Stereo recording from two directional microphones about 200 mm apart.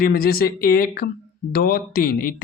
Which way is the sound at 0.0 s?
45° left (ahead or behind).